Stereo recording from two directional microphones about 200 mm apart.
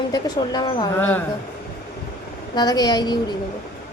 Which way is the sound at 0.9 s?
10° left (ahead or behind).